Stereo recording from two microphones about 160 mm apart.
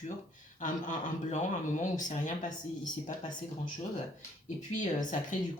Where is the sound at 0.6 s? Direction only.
50° left (ahead or behind).